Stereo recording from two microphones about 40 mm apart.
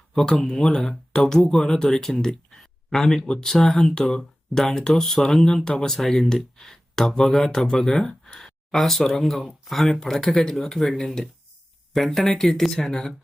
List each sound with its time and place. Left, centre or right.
0.1 s speech: centre
2.6 s a sound: centre
3.4 s speech: centre
4.5 s speech: centre
8.7 s speech: centre